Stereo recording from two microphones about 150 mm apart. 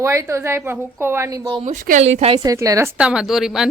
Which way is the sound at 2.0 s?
45° right (ahead or behind).